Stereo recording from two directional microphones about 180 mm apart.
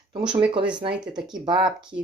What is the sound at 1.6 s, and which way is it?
Speech, 5° right (ahead or behind).